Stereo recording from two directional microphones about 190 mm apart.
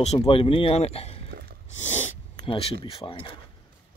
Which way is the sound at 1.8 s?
35° left (ahead or behind).